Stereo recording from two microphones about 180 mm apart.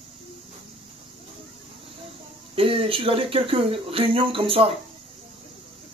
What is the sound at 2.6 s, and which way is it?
Speech, 30° right (ahead or behind).